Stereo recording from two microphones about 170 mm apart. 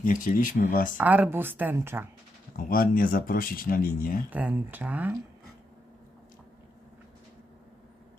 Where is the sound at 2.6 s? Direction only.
60° left (ahead or behind).